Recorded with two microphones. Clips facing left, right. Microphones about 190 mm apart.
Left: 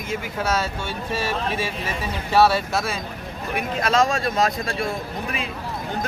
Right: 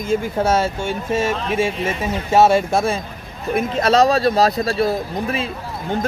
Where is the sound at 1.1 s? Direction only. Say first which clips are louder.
Right 5 dB; 45° right (ahead or behind).